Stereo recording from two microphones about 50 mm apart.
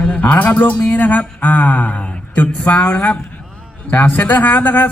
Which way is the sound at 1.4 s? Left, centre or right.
Left.